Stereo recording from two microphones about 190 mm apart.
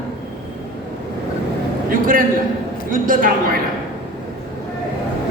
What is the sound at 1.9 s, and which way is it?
A man's voice, 45° right (ahead or behind).